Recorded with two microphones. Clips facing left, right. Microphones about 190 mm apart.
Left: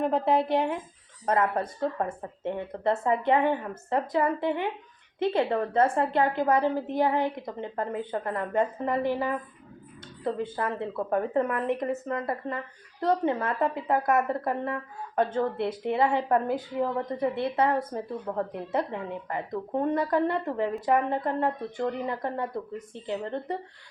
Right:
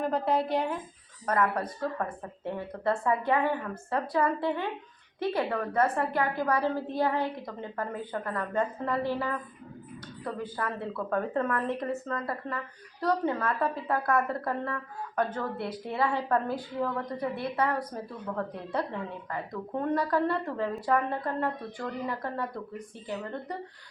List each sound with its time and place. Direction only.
0.1 s a woman's voice: 25° left (ahead or behind)